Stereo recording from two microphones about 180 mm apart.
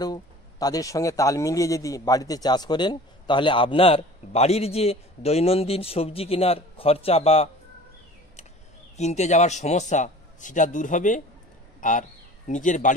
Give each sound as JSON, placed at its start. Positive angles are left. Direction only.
{"t": 0.0, "sound": "speech", "side_deg": 20}
{"t": 8.9, "sound": "a man's voice", "side_deg": 40}